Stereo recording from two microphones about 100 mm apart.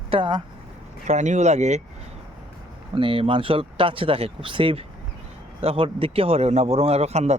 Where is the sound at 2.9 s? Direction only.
60° right (ahead or behind).